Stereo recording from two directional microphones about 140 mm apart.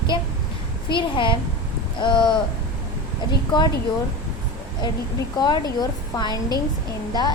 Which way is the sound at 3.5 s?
30° left (ahead or behind).